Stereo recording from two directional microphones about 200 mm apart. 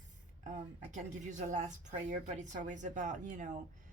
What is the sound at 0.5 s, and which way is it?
Speech, 40° right (ahead or behind).